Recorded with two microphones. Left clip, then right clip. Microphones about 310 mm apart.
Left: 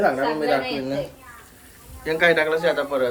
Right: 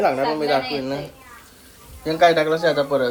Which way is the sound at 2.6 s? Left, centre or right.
Centre.